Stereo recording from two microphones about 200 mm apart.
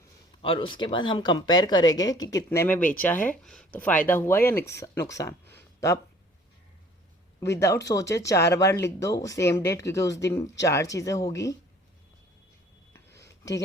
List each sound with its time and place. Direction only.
0.4 s speech: 25° left (ahead or behind)
7.3 s speech: 15° left (ahead or behind)
13.1 s a sound: 15° left (ahead or behind)